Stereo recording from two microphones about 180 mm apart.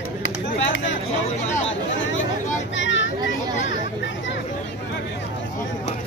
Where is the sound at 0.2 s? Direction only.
90° left.